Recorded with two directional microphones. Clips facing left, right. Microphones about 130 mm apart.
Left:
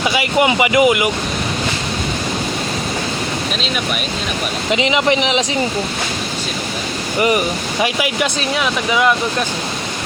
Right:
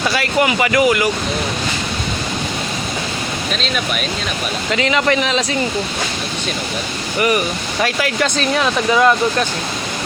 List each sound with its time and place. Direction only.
0.0 s speech: 15° left (ahead or behind)
4.7 s speech: 20° left (ahead or behind)
7.2 s speech: 20° left (ahead or behind)